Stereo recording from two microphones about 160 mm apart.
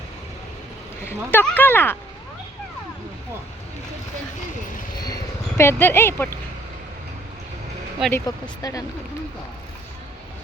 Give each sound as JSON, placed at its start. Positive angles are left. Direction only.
{"t": 1.0, "sound": "speech", "side_deg": 10}
{"t": 5.0, "sound": "speech", "side_deg": 20}
{"t": 8.1, "sound": "speech", "side_deg": 20}